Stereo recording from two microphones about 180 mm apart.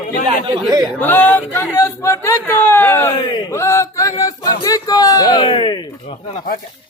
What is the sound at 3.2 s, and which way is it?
Speech, 25° left (ahead or behind).